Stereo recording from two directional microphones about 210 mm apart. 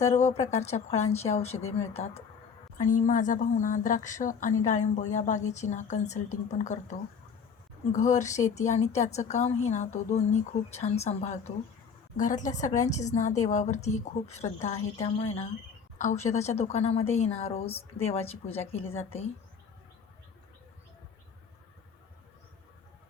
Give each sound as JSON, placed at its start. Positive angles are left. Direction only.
{"t": 0.1, "sound": "a woman's voice", "side_deg": 35}
{"t": 7.9, "sound": "a woman's voice", "side_deg": 35}